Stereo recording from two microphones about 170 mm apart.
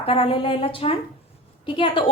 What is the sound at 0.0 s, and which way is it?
A woman's voice, 35° left (ahead or behind).